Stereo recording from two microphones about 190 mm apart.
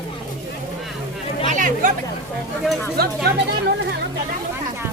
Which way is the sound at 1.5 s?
45° right (ahead or behind).